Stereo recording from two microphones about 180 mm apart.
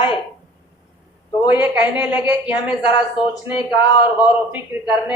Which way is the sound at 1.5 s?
10° right (ahead or behind).